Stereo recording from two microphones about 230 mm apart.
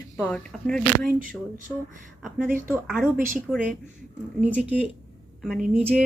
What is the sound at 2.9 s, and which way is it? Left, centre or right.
Speech, centre.